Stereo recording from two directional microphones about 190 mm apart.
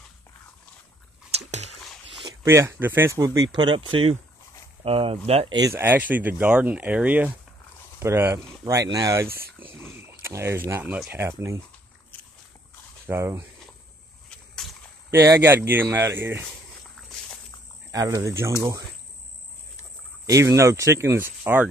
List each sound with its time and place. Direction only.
1.3 s biting: 35° right (ahead or behind)
2.4 s speech: 15° right (ahead or behind); by 5.6 s 30° right (ahead or behind)
5.6 s speech: 15° right (ahead or behind)
13.0 s speech: 15° right (ahead or behind)
15.0 s speech: 15° right (ahead or behind)
17.9 s speech: 15° right (ahead or behind)
20.2 s speech: 15° right (ahead or behind)